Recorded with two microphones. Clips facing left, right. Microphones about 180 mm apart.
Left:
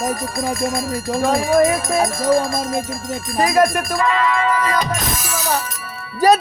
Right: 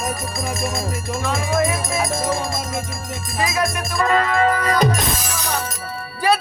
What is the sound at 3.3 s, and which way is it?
Music, 50° left (ahead or behind).